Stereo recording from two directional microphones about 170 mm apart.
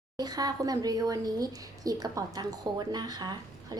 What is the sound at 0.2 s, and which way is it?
Speech, 25° right (ahead or behind).